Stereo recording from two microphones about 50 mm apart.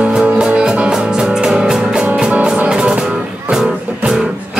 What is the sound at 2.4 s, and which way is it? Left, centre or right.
Music, right.